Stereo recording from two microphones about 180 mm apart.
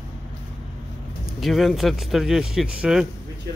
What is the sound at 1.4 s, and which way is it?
Speech, centre (ahead or behind).